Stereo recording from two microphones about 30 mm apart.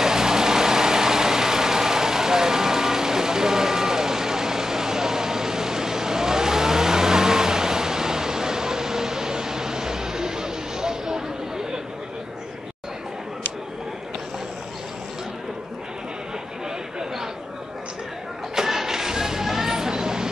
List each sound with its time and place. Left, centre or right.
0.0 s vehicle: centre
18.5 s music: centre